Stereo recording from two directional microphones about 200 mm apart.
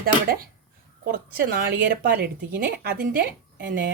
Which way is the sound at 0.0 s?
50° right (ahead or behind).